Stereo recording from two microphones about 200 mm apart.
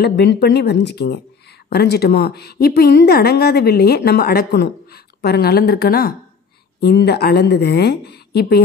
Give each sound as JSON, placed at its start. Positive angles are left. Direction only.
{"t": 0.0, "sound": "a woman's voice", "side_deg": 55}